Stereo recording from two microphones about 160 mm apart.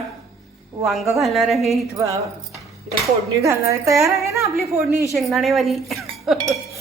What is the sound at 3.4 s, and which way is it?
A woman's voice, 20° right (ahead or behind).